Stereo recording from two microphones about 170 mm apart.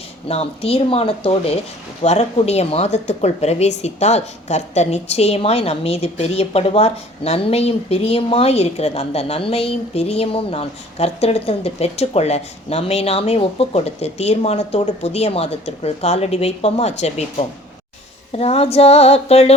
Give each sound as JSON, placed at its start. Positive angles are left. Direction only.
{"t": 0.3, "sound": "speech", "side_deg": 35}
{"t": 18.3, "sound": "speech", "side_deg": 35}